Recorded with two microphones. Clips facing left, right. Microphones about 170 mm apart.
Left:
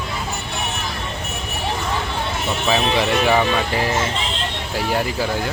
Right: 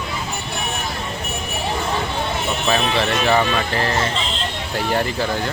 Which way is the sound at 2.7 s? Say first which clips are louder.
Left 2 dB; 10° left (ahead or behind).